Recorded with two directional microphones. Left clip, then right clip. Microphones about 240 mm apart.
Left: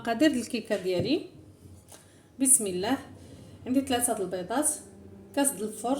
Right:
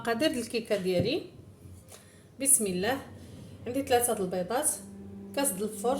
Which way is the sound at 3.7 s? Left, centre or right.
Centre.